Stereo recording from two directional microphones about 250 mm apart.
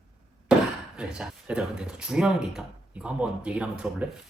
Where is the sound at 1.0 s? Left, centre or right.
Centre.